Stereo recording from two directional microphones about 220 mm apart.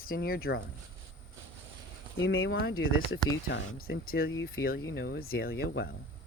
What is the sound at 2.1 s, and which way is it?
Speech, 65° left (ahead or behind).